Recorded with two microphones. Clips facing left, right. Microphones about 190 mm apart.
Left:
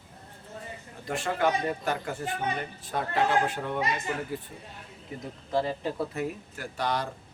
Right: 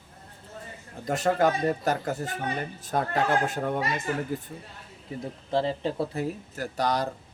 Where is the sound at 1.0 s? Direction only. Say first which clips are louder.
Right 4 dB; 40° right (ahead or behind).